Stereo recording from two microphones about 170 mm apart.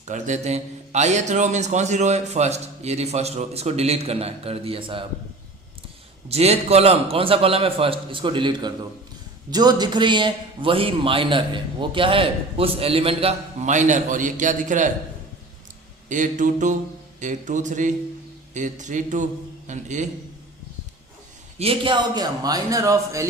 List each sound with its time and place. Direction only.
0.1 s a man's voice: 45° right (ahead or behind)
6.2 s a man's voice: 35° right (ahead or behind)
16.0 s a man's voice: 50° right (ahead or behind)
21.6 s a man's voice: 30° right (ahead or behind)